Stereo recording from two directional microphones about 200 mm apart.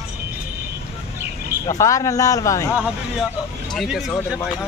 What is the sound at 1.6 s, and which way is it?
Speech, 15° left (ahead or behind).